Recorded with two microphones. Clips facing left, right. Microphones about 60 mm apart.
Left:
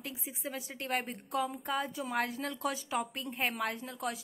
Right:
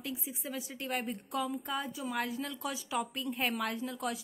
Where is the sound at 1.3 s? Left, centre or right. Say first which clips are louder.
Left 2 dB; left.